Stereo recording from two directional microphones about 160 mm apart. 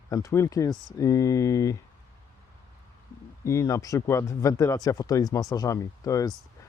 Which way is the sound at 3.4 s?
20° left (ahead or behind).